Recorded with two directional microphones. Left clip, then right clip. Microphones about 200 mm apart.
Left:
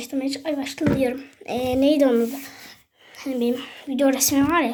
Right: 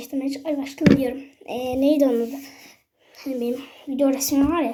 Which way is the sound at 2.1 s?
50° left (ahead or behind).